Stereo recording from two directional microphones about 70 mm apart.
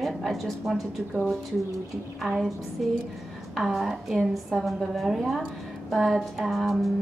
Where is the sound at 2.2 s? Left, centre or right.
Centre.